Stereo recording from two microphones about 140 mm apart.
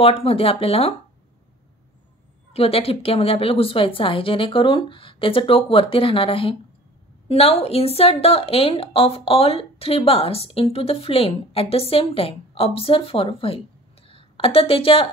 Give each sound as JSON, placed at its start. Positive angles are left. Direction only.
{"t": 0.0, "sound": "a woman's voice", "side_deg": 45}
{"t": 2.5, "sound": "a woman's voice", "side_deg": 45}